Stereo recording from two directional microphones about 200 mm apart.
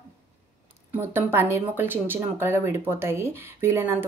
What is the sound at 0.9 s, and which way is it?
A woman's voice, 10° right (ahead or behind).